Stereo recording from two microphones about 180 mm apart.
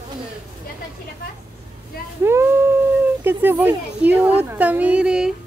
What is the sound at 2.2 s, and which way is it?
A woman's voice, 15° right (ahead or behind).